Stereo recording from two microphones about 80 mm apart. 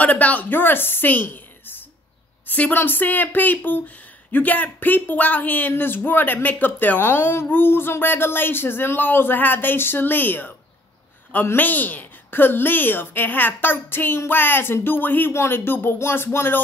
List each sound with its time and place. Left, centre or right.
0.0 s a woman's voice: centre